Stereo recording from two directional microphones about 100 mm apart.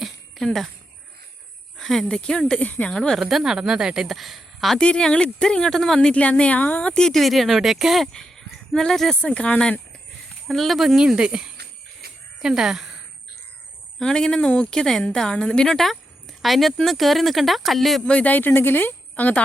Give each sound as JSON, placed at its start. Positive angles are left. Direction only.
{"t": 0.0, "sound": "jingle bell", "side_deg": 5}
{"t": 1.8, "sound": "speech", "side_deg": 5}
{"t": 10.5, "sound": "speech", "side_deg": 0}
{"t": 14.0, "sound": "speech", "side_deg": 10}
{"t": 18.1, "sound": "speech", "side_deg": 15}